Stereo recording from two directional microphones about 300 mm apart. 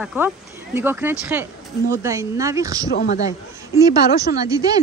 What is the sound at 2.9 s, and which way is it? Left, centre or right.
Speech, left.